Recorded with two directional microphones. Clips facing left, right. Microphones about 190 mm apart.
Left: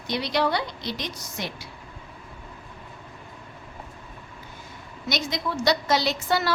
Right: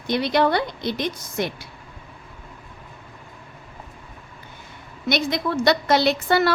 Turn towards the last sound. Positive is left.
turn(degrees=-60)  # may be behind; listen again after turning